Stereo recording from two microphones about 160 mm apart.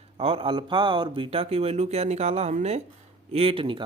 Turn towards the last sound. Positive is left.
turn(degrees=-35)  # may be behind; listen again after turning